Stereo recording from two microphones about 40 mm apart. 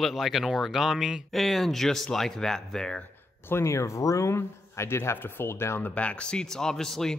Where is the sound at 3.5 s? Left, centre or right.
Left.